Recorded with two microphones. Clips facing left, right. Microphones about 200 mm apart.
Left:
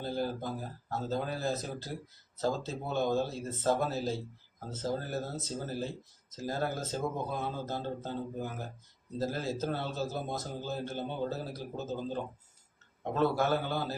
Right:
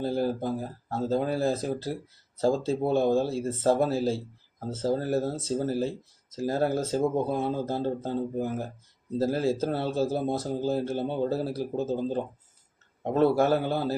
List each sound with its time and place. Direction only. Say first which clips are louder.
0.0 s speech: right 7 dB; 35° right (ahead or behind)